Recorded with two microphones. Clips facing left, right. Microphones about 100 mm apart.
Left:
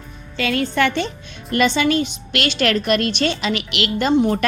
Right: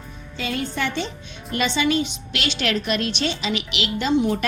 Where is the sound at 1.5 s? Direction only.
55° left (ahead or behind).